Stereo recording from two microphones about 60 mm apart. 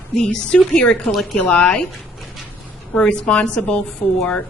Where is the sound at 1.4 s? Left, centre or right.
Centre.